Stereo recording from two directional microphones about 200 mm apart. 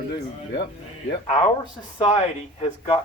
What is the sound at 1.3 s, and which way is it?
Speech, 25° left (ahead or behind).